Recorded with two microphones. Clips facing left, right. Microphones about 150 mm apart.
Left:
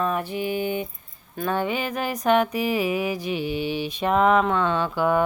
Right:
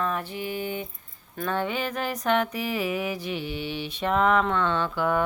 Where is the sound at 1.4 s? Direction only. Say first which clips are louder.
Left 3 dB; 10° left (ahead or behind).